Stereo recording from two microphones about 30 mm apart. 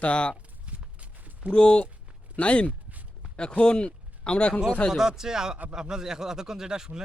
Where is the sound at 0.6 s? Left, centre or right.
Right.